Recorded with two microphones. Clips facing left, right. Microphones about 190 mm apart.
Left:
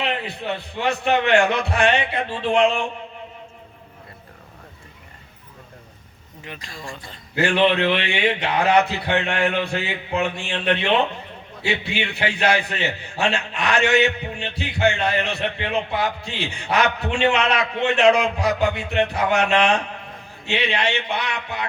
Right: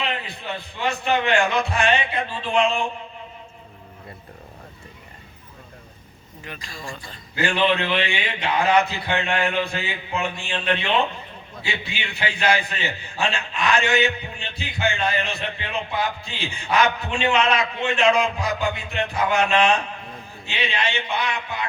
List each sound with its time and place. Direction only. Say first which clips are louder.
0.0 s a man's voice: left 3 dB; 65° left (ahead or behind)
6.4 s speech: even; 20° left (ahead or behind)
7.3 s a man's voice: left 3 dB; 70° left (ahead or behind)